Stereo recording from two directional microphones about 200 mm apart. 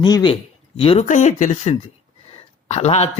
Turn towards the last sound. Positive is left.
turn(degrees=30)  # may be behind; listen again after turning